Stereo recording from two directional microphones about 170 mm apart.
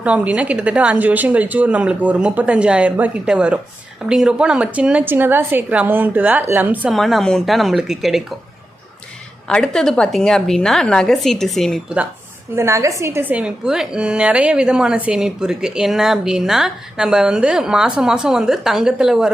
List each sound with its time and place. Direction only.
0.0 s speech: 5° right (ahead or behind)
6.9 s a woman's voice: centre (ahead or behind)
9.5 s a woman's voice: 5° left (ahead or behind)
12.5 s a woman's voice: 15° right (ahead or behind)